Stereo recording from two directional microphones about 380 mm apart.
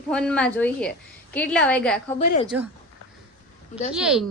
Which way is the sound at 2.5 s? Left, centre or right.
Centre.